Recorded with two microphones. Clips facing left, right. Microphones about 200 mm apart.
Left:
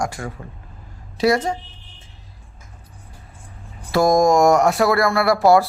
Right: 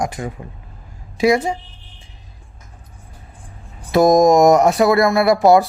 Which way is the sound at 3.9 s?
20° right (ahead or behind).